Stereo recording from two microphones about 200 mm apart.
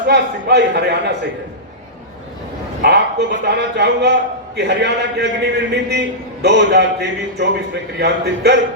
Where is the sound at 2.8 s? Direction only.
55° right (ahead or behind).